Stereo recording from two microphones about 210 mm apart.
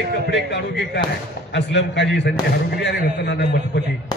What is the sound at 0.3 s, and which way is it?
A man's voice, 55° left (ahead or behind).